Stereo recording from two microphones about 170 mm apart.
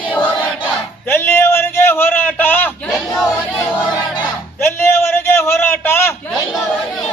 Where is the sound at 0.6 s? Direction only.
15° left (ahead or behind).